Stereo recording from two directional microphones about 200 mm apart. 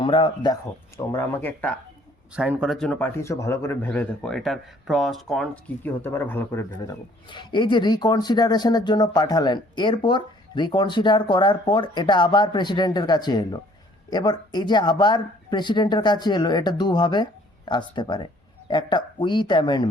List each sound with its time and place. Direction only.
0.0 s speech: 25° left (ahead or behind); by 1.7 s 10° left (ahead or behind)
2.3 s speech: 5° right (ahead or behind); by 19.9 s 20° left (ahead or behind)